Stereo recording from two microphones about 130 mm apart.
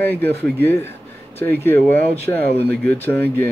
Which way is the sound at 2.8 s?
15° left (ahead or behind).